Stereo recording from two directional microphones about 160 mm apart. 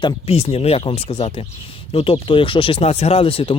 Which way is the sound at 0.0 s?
35° left (ahead or behind).